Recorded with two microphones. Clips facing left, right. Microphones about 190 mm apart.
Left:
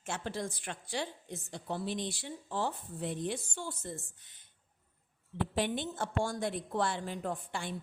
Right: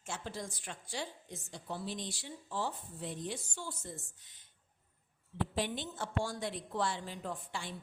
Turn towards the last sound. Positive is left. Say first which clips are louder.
# left 4 dB
turn(degrees=55)  # may be behind; listen again after turning